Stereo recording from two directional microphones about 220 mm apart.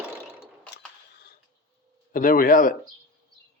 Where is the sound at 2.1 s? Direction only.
40° left (ahead or behind).